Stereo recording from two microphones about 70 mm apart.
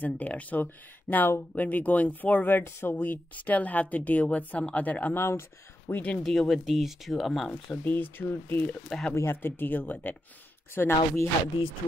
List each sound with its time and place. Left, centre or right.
0.0 s speech: left
5.1 s speech: left
5.9 s speech: left
6.5 s speech: centre
7.7 s speech: left
8.8 s speech: centre
9.1 s speech: left